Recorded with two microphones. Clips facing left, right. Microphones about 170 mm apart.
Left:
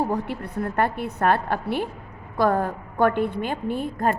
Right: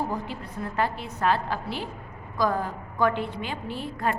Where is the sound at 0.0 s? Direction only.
65° left (ahead or behind).